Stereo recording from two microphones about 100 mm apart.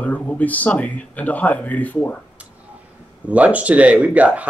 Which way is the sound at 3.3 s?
15° right (ahead or behind).